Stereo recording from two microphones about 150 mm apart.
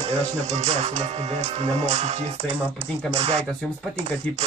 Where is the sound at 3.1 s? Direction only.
45° right (ahead or behind).